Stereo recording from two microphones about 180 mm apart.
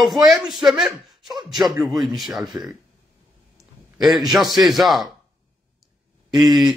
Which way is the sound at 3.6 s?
Centre (ahead or behind).